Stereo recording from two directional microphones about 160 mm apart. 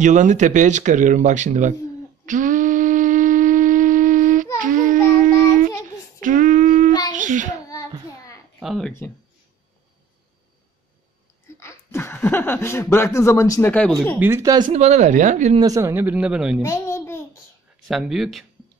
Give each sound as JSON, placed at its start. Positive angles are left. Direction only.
{"t": 0.0, "sound": "speech", "side_deg": -50}
{"t": 2.2, "sound": "wind instrument", "side_deg": -55}
{"t": 4.6, "sound": "babbling", "side_deg": -55}
{"t": 6.2, "sound": "a sound", "side_deg": -55}
{"t": 7.1, "sound": "child singing", "side_deg": -55}
{"t": 7.6, "sound": "child singing", "side_deg": 20}
{"t": 8.5, "sound": "speech", "side_deg": 0}
{"t": 11.4, "sound": "speech", "side_deg": 15}
{"t": 14.2, "sound": "speech", "side_deg": -20}
{"t": 14.7, "sound": "speech", "side_deg": -45}
{"t": 15.6, "sound": "speech", "side_deg": -20}
{"t": 16.6, "sound": "babbling", "side_deg": 15}
{"t": 17.8, "sound": "speech", "side_deg": 0}